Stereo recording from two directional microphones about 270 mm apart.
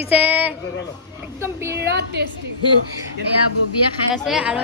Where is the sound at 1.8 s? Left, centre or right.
Right.